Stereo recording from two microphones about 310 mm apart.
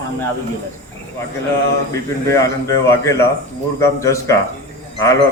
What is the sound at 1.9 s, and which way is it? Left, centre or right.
Speech, centre.